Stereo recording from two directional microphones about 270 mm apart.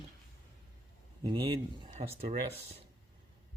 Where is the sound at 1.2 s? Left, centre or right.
Centre.